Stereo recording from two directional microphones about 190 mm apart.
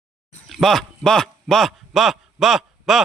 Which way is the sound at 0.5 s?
Centre (ahead or behind).